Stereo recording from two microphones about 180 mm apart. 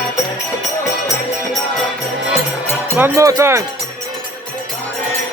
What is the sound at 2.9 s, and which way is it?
Speech, 15° right (ahead or behind).